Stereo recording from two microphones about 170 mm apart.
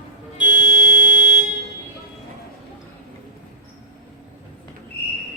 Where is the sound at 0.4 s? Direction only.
55° right (ahead or behind).